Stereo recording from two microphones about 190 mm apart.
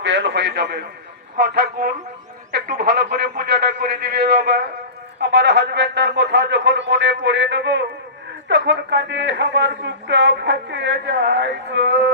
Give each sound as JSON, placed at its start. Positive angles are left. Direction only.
{"t": 0.0, "sound": "a man's voice", "side_deg": -70}